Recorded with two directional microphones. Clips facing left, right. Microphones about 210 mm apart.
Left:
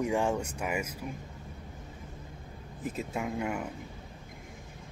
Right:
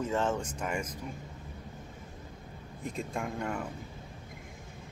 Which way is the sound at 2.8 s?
5° left (ahead or behind).